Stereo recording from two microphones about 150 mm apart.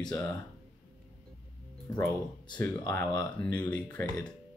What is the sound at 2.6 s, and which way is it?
Speech, 15° left (ahead or behind).